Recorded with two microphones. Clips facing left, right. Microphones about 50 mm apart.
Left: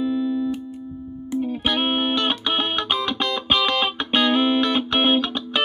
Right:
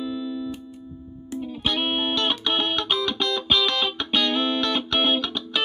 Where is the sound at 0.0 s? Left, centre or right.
Left.